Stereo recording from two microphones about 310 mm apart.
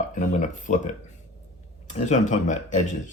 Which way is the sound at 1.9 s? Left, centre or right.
Left.